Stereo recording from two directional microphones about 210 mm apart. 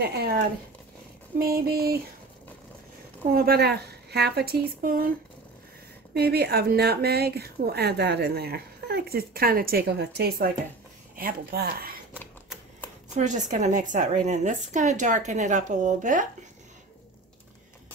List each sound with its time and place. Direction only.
0.0 s speech: 50° right (ahead or behind)
1.4 s speech: 45° right (ahead or behind)
3.3 s speech: 50° right (ahead or behind)
6.1 s speech: 50° right (ahead or behind)
12.2 s typewriter: 10° left (ahead or behind)
13.1 s a woman's voice: 35° right (ahead or behind)